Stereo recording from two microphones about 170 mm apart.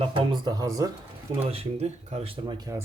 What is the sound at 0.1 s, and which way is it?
Speech, 30° right (ahead or behind).